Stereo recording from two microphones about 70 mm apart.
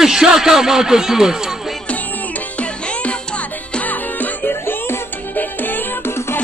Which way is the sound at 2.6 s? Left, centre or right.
Centre.